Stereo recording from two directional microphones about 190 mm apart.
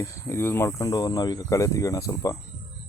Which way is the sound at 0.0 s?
15° left (ahead or behind).